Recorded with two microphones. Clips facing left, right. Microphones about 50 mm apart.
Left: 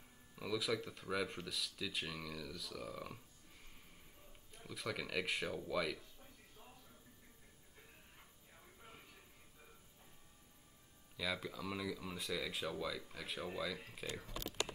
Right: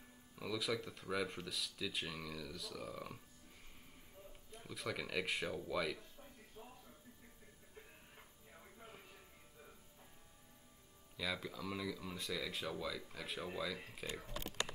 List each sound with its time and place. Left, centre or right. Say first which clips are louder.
0.4 s speech: left 1 dB; centre
4.5 s speech: even; centre
11.1 s speech: left 1 dB; centre